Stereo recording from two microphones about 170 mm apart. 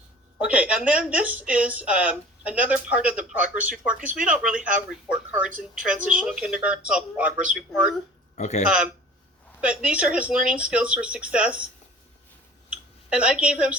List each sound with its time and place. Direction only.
0.3 s speech: 10° right (ahead or behind)
8.4 s speech: 40° left (ahead or behind)
9.6 s speech: 5° right (ahead or behind)
12.7 s a woman's voice: 5° right (ahead or behind)